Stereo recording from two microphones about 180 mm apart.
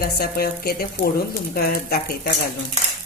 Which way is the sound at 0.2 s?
55° left (ahead or behind).